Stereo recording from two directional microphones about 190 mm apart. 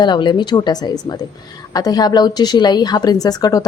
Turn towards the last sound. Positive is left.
turn(degrees=20)  # may be behind; listen again after turning